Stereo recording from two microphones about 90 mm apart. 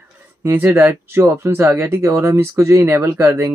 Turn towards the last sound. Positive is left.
turn(degrees=-30)  # may be behind; listen again after turning